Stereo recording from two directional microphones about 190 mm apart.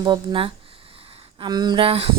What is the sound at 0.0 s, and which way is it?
Speech, 25° right (ahead or behind).